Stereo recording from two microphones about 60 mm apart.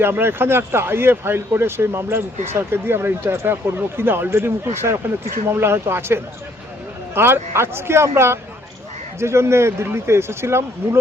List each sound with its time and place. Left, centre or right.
0.0 s speech: right